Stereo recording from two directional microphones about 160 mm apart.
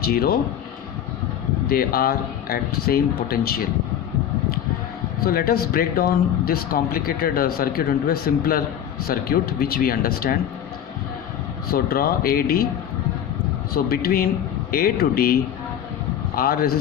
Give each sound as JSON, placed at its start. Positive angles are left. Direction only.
{"t": 0.0, "sound": "speech", "side_deg": 70}
{"t": 1.6, "sound": "speech", "side_deg": 70}
{"t": 5.2, "sound": "speech", "side_deg": 65}
{"t": 11.7, "sound": "speech", "side_deg": 70}
{"t": 13.7, "sound": "speech", "side_deg": 70}